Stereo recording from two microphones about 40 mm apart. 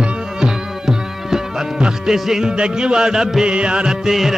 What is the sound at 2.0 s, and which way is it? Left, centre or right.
Music, centre.